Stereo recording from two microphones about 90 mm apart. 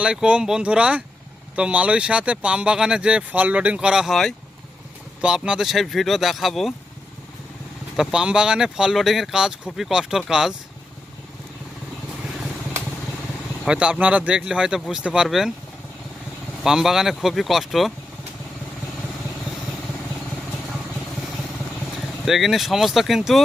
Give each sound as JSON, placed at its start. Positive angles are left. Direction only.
{"t": 0.0, "sound": "speech", "side_deg": -10}
{"t": 5.2, "sound": "speech", "side_deg": -10}
{"t": 7.9, "sound": "speech", "side_deg": -10}
{"t": 13.7, "sound": "speech", "side_deg": -10}
{"t": 16.6, "sound": "speech", "side_deg": -5}
{"t": 22.3, "sound": "speech", "side_deg": 0}